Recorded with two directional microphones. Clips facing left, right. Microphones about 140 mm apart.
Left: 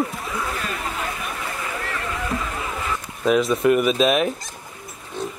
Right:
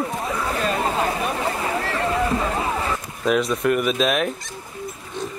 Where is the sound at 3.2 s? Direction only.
Centre (ahead or behind).